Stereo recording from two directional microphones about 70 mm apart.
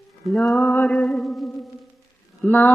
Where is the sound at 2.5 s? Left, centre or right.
Left.